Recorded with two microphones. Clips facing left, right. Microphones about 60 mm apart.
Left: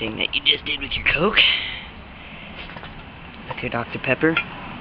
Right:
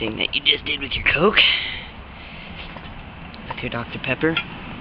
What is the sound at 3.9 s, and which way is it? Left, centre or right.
Speech, left.